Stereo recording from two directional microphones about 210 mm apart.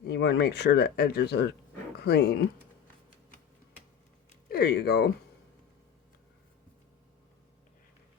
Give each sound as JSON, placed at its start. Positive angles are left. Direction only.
{"t": 0.1, "sound": "speech", "side_deg": 50}
{"t": 4.4, "sound": "speech", "side_deg": 45}